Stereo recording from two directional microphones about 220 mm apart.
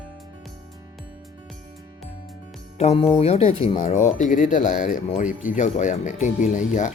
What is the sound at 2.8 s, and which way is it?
Speech, 30° left (ahead or behind).